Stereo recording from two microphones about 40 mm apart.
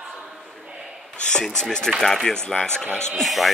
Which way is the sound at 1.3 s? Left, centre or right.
Centre.